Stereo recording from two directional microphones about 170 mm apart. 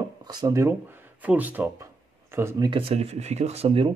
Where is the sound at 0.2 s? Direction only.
20° right (ahead or behind).